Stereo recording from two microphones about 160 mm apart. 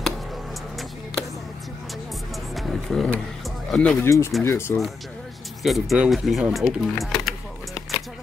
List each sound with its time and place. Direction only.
2.5 s vehicle: centre (ahead or behind)
3.7 s speech: centre (ahead or behind)
4.0 s speech: 15° left (ahead or behind)
5.6 s speech: centre (ahead or behind)